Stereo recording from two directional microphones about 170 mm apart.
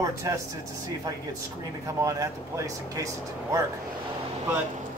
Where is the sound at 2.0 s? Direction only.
20° right (ahead or behind).